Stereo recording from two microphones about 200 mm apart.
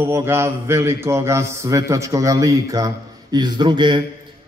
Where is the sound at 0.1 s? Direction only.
10° right (ahead or behind).